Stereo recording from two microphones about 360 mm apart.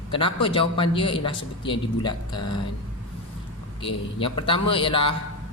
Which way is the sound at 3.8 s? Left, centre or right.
Centre.